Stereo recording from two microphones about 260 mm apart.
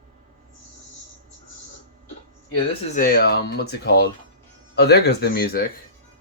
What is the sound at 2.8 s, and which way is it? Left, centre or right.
Speech, left.